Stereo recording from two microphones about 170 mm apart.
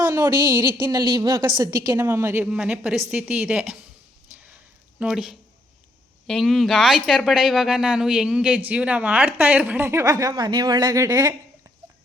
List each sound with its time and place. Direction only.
0.0 s a woman's voice: 20° right (ahead or behind)
4.9 s a woman's voice: 5° right (ahead or behind); by 11.3 s 20° right (ahead or behind)